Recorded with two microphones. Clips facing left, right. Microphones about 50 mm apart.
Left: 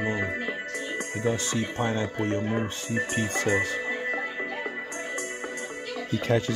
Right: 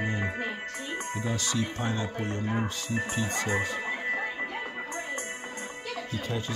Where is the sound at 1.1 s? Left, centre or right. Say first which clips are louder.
Left 4 dB; left.